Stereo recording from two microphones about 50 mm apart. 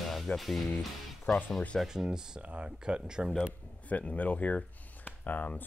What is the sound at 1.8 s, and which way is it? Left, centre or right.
Speech, centre.